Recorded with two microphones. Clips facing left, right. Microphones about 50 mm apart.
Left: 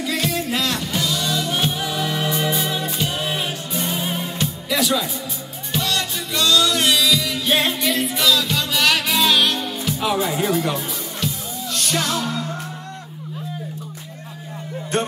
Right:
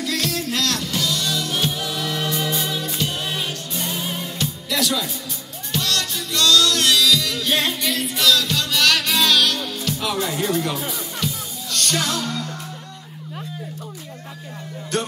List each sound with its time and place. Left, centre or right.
0.0 s music: centre
14.9 s music: left